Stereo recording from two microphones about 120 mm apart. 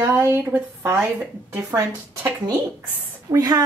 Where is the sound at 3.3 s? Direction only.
30° right (ahead or behind).